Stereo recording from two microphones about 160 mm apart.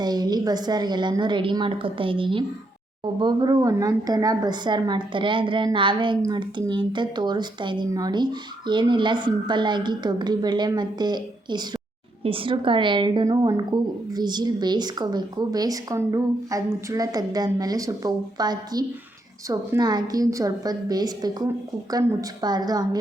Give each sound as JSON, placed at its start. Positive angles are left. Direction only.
{"t": 0.0, "sound": "speech", "side_deg": -25}